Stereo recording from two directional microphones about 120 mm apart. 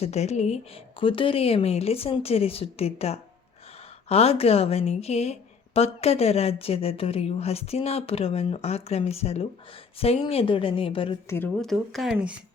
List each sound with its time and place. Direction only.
0.0 s a woman's voice: 65° left (ahead or behind); by 11.2 s 50° left (ahead or behind)
11.5 s speech: centre (ahead or behind)